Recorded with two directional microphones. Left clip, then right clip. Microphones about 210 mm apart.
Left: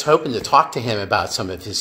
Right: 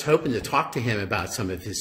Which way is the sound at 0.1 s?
20° right (ahead or behind).